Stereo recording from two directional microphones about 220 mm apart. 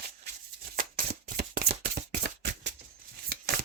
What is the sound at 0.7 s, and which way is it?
Shuffling cards, 40° right (ahead or behind).